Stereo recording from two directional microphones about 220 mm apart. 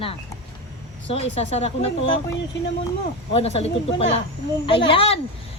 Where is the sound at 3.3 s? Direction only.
30° left (ahead or behind).